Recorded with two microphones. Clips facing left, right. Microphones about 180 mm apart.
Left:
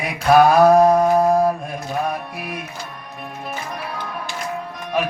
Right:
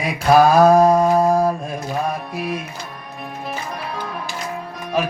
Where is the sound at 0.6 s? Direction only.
30° right (ahead or behind).